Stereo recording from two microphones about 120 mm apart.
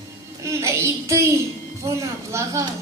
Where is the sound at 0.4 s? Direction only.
25° right (ahead or behind).